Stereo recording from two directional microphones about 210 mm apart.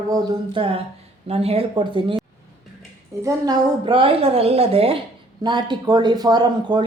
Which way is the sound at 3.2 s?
20° right (ahead or behind).